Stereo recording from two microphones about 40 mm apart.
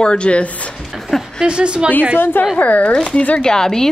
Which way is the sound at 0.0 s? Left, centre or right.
Left.